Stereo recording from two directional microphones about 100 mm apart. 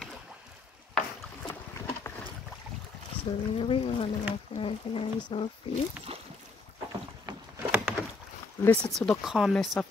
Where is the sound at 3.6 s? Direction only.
65° left (ahead or behind).